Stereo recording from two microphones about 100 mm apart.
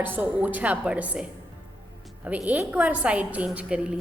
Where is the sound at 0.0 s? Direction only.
15° right (ahead or behind).